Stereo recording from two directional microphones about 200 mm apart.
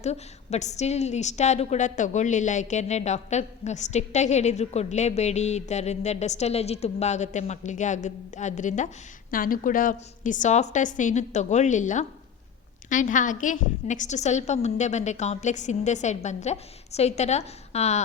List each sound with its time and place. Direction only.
0.0 s a woman's voice: 35° left (ahead or behind)